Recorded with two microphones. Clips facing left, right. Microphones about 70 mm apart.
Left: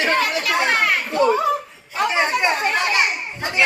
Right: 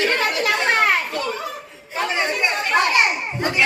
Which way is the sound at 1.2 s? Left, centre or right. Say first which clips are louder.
Left 10 dB; left.